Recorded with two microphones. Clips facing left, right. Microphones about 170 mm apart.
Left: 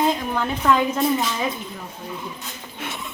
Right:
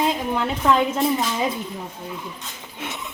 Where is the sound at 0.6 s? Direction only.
25° right (ahead or behind).